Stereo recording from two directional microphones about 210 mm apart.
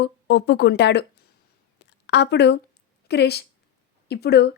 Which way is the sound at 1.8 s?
55° left (ahead or behind).